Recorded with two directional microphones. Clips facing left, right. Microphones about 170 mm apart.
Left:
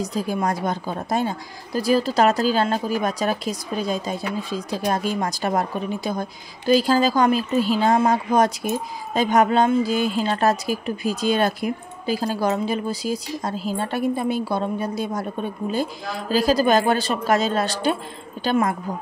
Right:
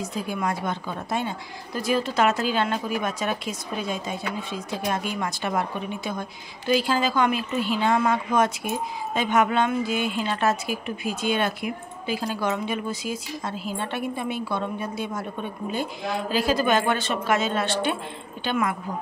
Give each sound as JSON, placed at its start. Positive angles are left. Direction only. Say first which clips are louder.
{"t": 0.0, "sound": "speech", "louder": "left 4 dB", "side_deg": 35}